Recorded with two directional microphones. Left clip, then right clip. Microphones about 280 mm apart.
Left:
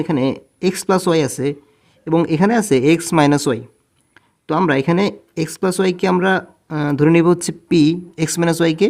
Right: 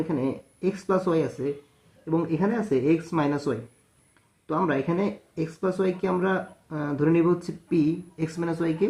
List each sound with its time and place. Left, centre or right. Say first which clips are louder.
0.1 s speech: left 9 dB; left